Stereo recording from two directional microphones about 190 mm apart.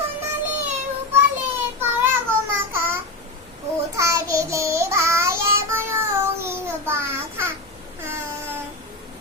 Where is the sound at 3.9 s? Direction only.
15° right (ahead or behind).